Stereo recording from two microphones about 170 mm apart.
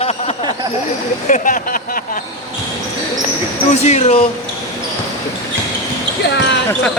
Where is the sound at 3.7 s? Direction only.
40° left (ahead or behind).